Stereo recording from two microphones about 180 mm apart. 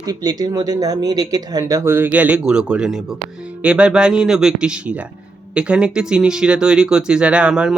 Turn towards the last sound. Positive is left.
turn(degrees=-5)  # may be behind; listen again after turning